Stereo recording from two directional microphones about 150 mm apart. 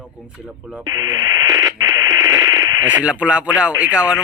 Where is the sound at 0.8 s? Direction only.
25° right (ahead or behind).